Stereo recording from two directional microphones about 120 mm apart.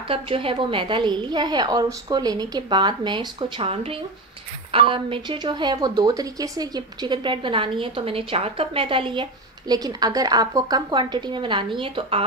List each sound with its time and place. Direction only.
0.1 s a woman's voice: 50° right (ahead or behind)